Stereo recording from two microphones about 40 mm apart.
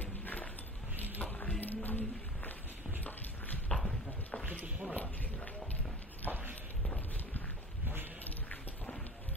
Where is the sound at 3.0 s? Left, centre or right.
Left.